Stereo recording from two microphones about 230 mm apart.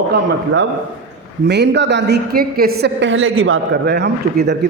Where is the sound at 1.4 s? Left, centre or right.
Right.